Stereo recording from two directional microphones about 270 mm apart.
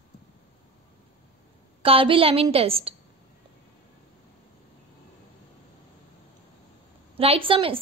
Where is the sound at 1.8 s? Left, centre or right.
Centre.